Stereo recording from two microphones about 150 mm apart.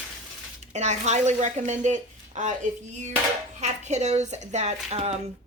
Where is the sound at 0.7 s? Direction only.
50° right (ahead or behind).